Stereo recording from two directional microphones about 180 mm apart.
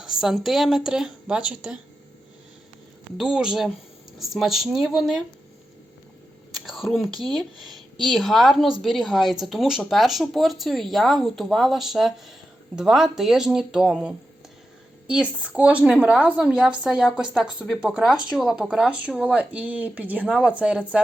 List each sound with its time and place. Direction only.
0.0 s a woman's voice: centre (ahead or behind)
3.2 s speech: 5° right (ahead or behind)
6.7 s speech: centre (ahead or behind)